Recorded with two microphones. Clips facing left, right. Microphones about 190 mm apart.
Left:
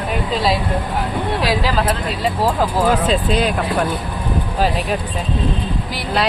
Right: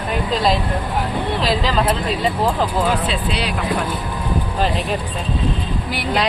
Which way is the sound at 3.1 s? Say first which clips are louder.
Left 6 dB; 45° left (ahead or behind).